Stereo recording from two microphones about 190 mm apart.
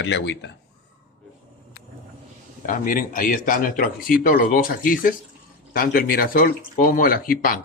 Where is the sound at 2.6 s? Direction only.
45° left (ahead or behind).